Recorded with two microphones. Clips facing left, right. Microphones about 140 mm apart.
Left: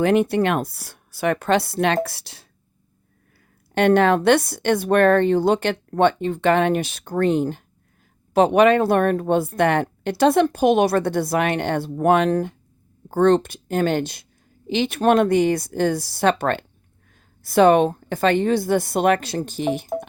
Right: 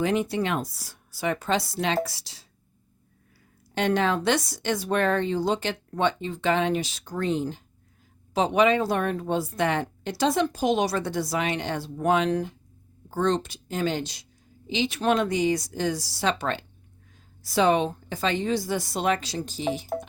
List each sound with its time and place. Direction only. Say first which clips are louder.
0.0 s speech: left 7 dB; 60° left (ahead or behind)
3.8 s speech: left 8 dB; 60° left (ahead or behind)